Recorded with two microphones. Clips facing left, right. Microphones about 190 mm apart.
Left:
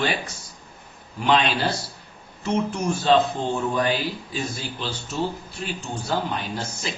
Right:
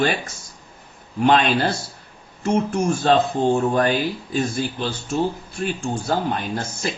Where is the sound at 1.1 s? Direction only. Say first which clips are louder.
Right 4 dB; 50° right (ahead or behind).